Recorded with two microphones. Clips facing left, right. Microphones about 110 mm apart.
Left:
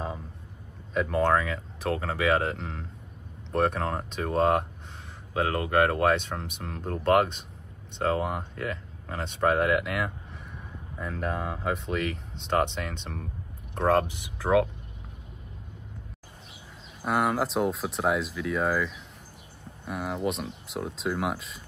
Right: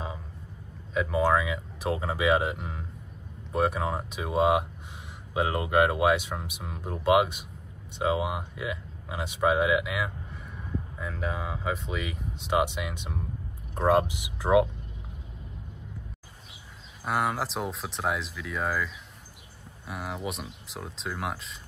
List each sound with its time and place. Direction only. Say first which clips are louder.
0.9 s speech: even; 5° right (ahead or behind)
17.0 s speech: left 3 dB; centre (ahead or behind)